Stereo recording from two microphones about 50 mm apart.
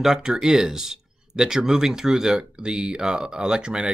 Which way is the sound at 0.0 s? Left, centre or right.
Centre.